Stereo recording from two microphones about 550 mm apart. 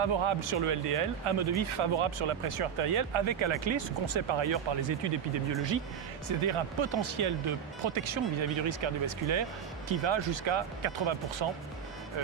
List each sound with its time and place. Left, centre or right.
0.0 s speech: right
6.2 s speech: right